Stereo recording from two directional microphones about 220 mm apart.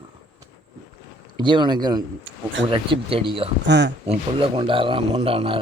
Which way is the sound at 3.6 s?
55° right (ahead or behind).